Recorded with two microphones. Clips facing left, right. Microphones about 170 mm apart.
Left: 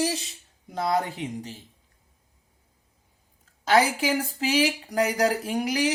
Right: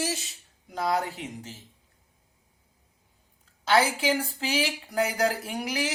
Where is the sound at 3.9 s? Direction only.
45° left (ahead or behind).